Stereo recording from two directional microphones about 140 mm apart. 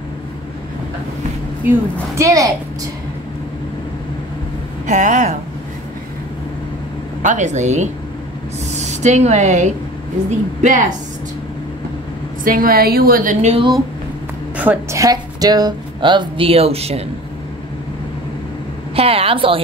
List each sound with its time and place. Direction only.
1.6 s a woman's voice: 15° right (ahead or behind)
4.8 s speech: 60° right (ahead or behind)
7.2 s a woman's voice: 60° right (ahead or behind)
12.4 s a woman's voice: 90° right; by 13.5 s 70° right (ahead or behind)
14.6 s a woman's voice: 10° right (ahead or behind)
15.0 s speech: 25° right (ahead or behind); by 17.0 s 45° right (ahead or behind)
18.9 s a woman's voice: 45° right (ahead or behind)